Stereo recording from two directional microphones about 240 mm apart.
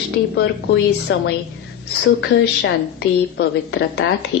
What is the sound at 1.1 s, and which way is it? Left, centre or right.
A woman's voice, left.